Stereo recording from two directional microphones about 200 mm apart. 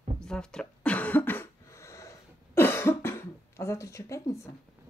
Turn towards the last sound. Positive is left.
turn(degrees=15)  # may be behind; listen again after turning